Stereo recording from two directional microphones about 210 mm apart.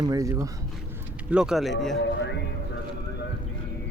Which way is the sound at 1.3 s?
5° right (ahead or behind).